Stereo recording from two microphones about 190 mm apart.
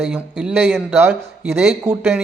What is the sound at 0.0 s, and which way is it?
Speech, 5° right (ahead or behind).